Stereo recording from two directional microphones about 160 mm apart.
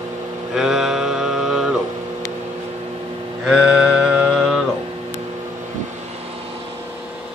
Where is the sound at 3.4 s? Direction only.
5° right (ahead or behind).